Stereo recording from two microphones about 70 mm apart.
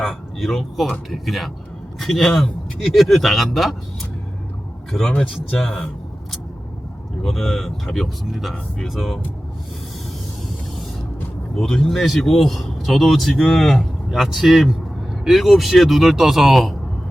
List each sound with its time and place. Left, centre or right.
0.0 s speech: centre
4.9 s speech: centre
7.3 s speech: centre
11.5 s speech: centre
13.3 s speech: centre
13.6 s speech: centre